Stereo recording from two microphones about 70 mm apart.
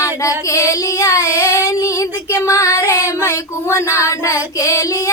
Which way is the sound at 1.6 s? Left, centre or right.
Left.